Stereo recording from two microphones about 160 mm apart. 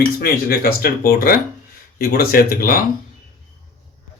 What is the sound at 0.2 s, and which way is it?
Speech, 70° left (ahead or behind).